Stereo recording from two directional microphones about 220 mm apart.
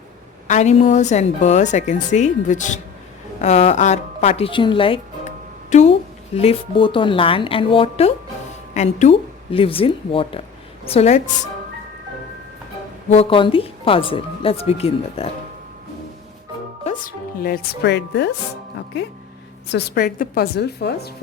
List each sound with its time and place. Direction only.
0.4 s a woman's voice: 30° left (ahead or behind)
13.1 s speech: 25° left (ahead or behind)
16.8 s speech: 40° left (ahead or behind)
19.7 s a woman's voice: 40° left (ahead or behind)